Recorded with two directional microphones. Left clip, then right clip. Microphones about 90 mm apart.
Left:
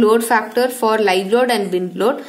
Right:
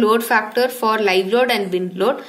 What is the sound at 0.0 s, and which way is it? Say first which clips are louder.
A woman's voice: left 2 dB; 40° left (ahead or behind).